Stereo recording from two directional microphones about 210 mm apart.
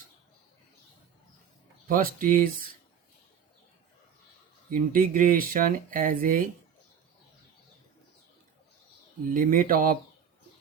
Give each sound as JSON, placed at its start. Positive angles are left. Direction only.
{"t": 1.9, "sound": "speech", "side_deg": -40}
{"t": 4.7, "sound": "speech", "side_deg": -40}
{"t": 9.3, "sound": "speech", "side_deg": -40}